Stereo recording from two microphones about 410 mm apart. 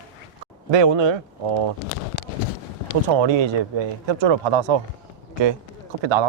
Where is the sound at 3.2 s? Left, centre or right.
Right.